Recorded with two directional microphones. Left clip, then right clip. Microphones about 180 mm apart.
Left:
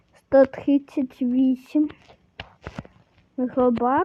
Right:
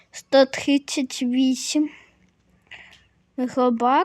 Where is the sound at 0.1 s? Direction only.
Centre (ahead or behind).